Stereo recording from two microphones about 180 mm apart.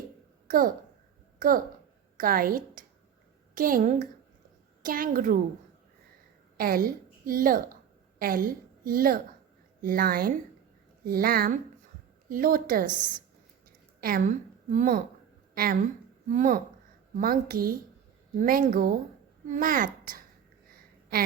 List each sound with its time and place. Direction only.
0.4 s a child's voice: 50° right (ahead or behind)
6.6 s a woman's voice: 55° right (ahead or behind)
20.7 s a sound: 55° right (ahead or behind)